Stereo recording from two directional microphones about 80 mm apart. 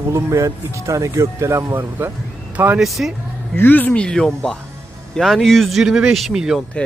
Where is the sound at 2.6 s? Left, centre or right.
Right.